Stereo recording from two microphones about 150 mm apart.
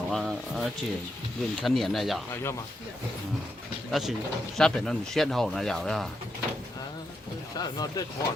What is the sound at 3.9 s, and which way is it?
A man's voice, centre (ahead or behind).